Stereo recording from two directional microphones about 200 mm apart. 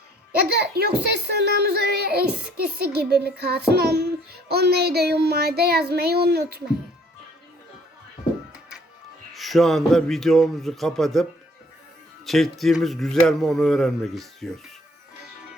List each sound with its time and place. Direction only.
0.3 s a child's voice: 50° right (ahead or behind)
9.3 s speech: centre (ahead or behind)